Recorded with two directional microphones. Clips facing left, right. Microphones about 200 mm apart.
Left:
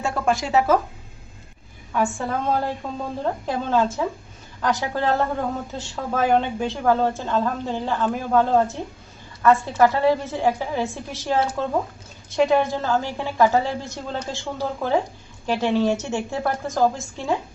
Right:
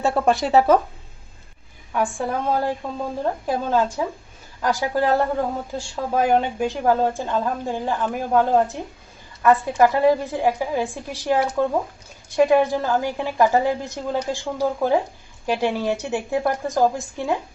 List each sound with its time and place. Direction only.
0.0 s a woman's voice: 35° right (ahead or behind)
1.9 s a woman's voice: 15° right (ahead or behind)